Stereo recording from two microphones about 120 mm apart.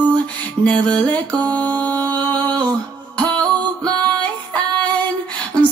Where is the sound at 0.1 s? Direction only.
10° left (ahead or behind).